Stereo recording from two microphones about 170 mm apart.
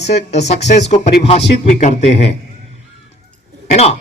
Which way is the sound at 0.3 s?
40° left (ahead or behind).